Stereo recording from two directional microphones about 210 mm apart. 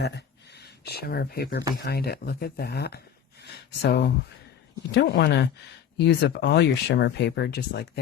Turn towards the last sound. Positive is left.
turn(degrees=50)  # may be behind; listen again after turning